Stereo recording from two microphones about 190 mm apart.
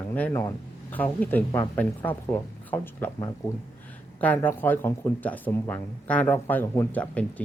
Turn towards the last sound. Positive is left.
turn(degrees=5)  # may be behind; listen again after turning